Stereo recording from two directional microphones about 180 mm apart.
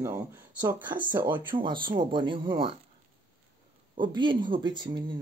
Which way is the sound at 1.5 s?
25° right (ahead or behind).